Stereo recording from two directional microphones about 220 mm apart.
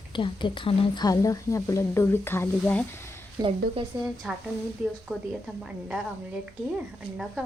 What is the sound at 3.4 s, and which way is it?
Speech, 25° right (ahead or behind).